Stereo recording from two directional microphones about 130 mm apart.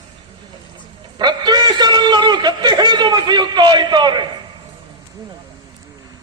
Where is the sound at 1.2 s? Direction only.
35° right (ahead or behind).